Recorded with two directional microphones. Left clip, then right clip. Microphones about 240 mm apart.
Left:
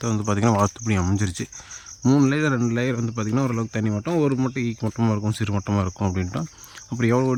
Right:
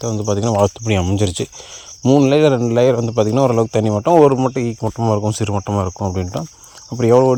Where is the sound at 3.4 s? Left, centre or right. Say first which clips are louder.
Right 13 dB; right.